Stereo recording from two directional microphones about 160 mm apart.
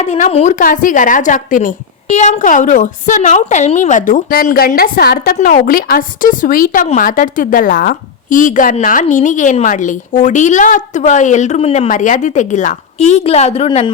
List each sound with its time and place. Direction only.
0.0 s a woman's voice: 45° left (ahead or behind)
0.6 s a woman's voice: 55° left (ahead or behind)
11.9 s a woman's voice: 55° left (ahead or behind); by 13.9 s 35° left (ahead or behind)